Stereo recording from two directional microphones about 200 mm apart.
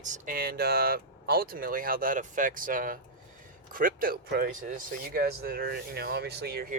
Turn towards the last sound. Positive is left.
turn(degrees=-50)  # may be behind; listen again after turning